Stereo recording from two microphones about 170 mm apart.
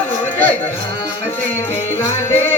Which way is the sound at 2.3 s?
15° left (ahead or behind).